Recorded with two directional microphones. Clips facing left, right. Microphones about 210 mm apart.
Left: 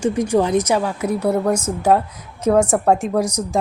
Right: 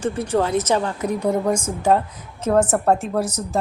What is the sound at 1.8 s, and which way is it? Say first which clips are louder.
A woman's voice: left 2 dB; 10° left (ahead or behind).